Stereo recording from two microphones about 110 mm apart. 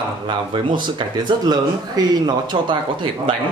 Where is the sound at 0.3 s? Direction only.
45° right (ahead or behind).